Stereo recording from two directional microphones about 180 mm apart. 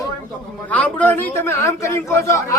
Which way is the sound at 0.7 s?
10° left (ahead or behind).